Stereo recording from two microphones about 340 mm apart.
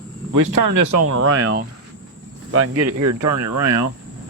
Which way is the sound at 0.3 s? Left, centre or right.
Right.